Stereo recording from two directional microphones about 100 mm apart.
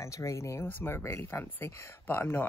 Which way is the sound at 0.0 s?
30° left (ahead or behind).